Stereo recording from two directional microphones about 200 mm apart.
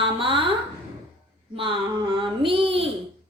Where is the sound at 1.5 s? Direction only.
25° right (ahead or behind).